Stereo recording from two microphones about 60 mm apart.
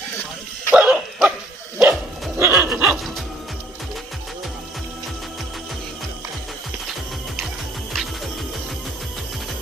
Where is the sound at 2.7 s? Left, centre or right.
Right.